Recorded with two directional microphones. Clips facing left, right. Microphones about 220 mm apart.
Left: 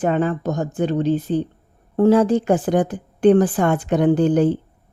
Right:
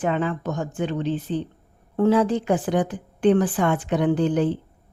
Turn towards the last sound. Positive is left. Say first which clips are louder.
# left 5 dB
turn(degrees=45)  # may be behind; listen again after turning